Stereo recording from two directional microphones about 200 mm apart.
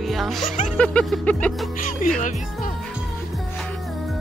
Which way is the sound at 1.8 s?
40° left (ahead or behind).